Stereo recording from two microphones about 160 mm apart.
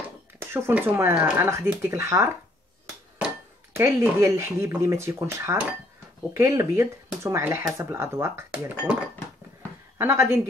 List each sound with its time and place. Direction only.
0.4 s speech: 15° right (ahead or behind)
3.7 s speech: 15° right (ahead or behind)
9.9 s speech: 15° right (ahead or behind)